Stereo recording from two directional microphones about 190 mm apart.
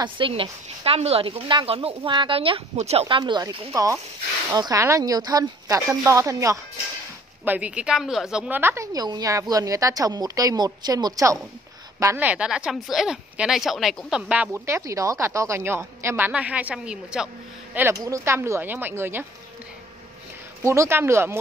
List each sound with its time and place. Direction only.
0.0 s speech: 25° right (ahead or behind); by 17.3 s 5° right (ahead or behind)
17.7 s speech: 15° right (ahead or behind)
20.6 s speech: 15° right (ahead or behind)